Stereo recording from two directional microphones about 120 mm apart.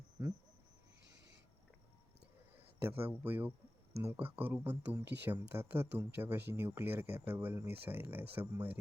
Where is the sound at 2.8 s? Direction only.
20° right (ahead or behind).